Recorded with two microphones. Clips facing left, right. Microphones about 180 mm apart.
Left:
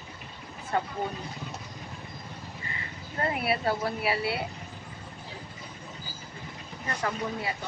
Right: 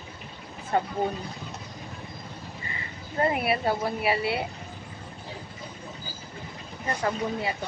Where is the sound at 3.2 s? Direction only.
15° right (ahead or behind).